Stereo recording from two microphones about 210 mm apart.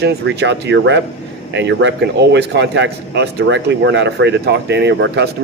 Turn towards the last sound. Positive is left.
turn(degrees=-55)  # may be behind; listen again after turning